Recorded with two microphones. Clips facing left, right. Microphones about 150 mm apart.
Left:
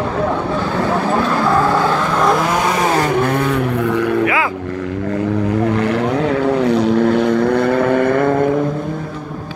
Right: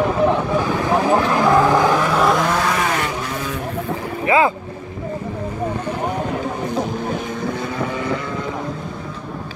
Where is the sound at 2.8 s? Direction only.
35° left (ahead or behind).